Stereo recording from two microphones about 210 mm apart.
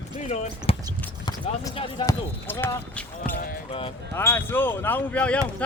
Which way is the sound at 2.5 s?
10° left (ahead or behind).